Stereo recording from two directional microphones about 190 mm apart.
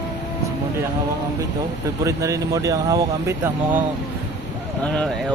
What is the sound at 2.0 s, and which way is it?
Speech, 15° right (ahead or behind).